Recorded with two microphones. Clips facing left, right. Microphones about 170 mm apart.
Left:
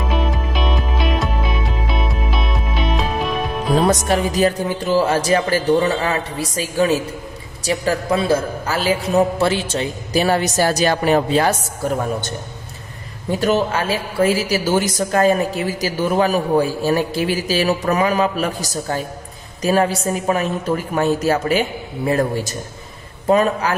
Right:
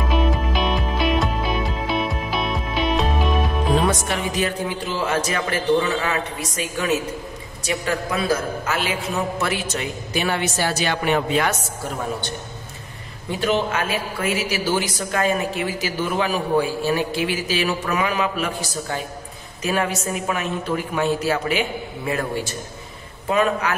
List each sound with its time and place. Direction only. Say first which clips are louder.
0.1 s music: right 2 dB; centre (ahead or behind)
3.7 s a woman's voice: left 6 dB; 40° left (ahead or behind)
13.4 s a woman's voice: left 3 dB; 35° left (ahead or behind)